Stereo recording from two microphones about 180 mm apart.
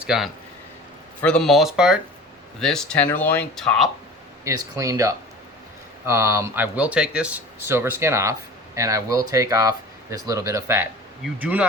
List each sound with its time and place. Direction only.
0.0 s speech: 5° right (ahead or behind)
4.4 s speech: 15° right (ahead or behind)